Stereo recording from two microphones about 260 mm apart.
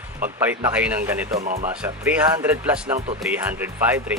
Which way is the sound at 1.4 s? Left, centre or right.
Right.